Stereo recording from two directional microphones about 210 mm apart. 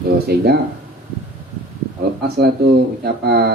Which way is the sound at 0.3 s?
50° right (ahead or behind).